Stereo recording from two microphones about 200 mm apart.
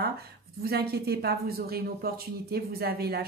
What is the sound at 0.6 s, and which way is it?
Speech, 50° right (ahead or behind).